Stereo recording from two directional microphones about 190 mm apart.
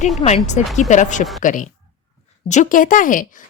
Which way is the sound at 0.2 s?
35° left (ahead or behind).